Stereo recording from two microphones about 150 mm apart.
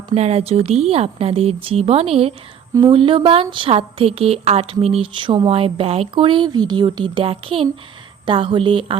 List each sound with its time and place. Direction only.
0.1 s speech: 45° right (ahead or behind)